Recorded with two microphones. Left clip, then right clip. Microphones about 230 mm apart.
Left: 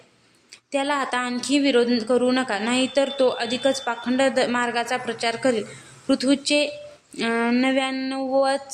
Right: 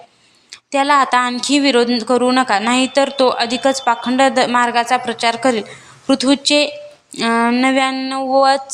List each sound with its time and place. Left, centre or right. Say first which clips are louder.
0.5 s a woman's voice: right 10 dB; centre